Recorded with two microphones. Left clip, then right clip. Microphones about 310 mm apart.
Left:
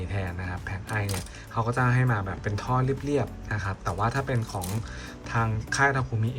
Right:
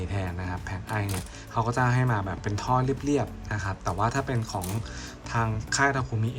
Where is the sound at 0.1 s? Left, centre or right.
Centre.